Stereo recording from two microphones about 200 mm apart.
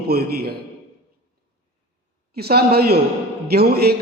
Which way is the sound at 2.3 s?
50° right (ahead or behind).